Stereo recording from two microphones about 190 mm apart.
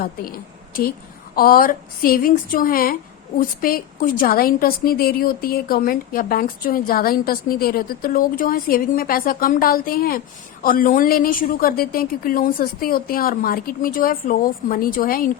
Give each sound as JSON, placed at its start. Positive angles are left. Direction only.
{"t": 1.4, "sound": "a woman's voice", "side_deg": 50}